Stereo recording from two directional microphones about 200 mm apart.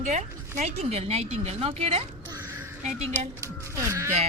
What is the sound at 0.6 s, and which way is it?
A woman's voice, 30° right (ahead or behind).